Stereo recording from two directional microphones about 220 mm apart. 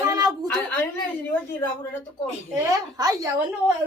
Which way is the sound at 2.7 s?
15° right (ahead or behind).